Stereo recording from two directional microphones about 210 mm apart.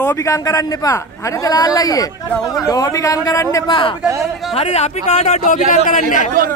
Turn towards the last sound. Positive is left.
turn(degrees=35)  # may be behind; listen again after turning